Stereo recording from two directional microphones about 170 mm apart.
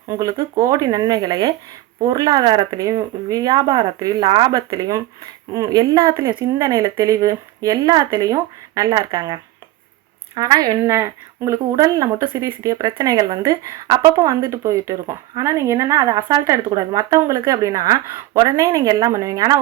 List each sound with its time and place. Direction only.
0.1 s speech: 20° right (ahead or behind)